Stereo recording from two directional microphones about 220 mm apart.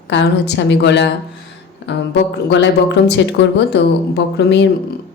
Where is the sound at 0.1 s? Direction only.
55° left (ahead or behind).